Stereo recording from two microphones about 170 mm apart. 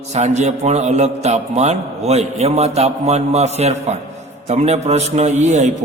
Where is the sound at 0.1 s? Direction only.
40° right (ahead or behind).